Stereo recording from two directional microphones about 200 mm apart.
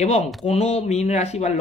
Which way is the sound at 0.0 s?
35° left (ahead or behind).